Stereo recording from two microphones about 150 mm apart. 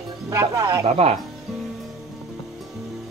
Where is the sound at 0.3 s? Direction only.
20° right (ahead or behind).